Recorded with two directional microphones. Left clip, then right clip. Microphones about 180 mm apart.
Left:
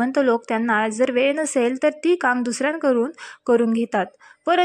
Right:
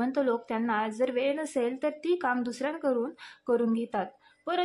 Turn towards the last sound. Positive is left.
turn(degrees=30)  # may be behind; listen again after turning